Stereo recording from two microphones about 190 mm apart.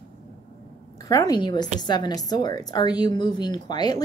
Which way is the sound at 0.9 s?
15° left (ahead or behind).